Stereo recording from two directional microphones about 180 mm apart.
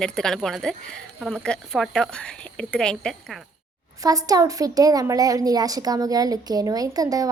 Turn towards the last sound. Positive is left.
turn(degrees=-20)  # may be behind; listen again after turning